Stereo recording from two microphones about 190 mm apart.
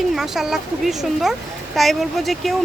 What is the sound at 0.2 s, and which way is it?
Speech, centre (ahead or behind).